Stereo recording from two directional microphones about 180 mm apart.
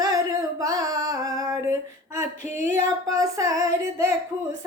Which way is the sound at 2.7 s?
15° right (ahead or behind).